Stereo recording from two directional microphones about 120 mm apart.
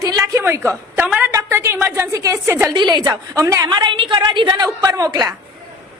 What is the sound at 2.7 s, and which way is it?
A woman's voice, 35° right (ahead or behind).